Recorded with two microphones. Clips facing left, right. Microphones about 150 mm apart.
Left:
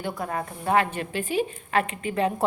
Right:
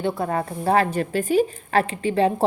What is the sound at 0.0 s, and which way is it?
A woman's voice, 30° right (ahead or behind).